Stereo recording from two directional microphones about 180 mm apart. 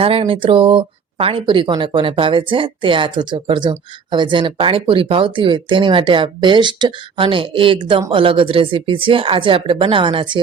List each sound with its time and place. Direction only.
0.0 s speech: 30° right (ahead or behind)